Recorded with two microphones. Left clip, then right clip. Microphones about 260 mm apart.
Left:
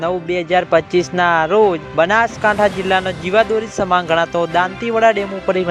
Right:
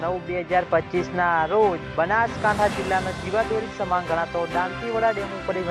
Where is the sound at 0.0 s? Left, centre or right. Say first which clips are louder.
Left 7 dB; left.